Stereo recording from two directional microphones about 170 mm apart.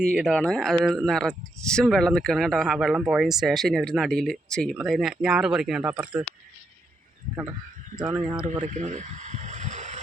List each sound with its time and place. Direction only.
0.3 s speech: 5° left (ahead or behind)
7.9 s speech: 25° right (ahead or behind)
8.4 s a sound: 45° right (ahead or behind)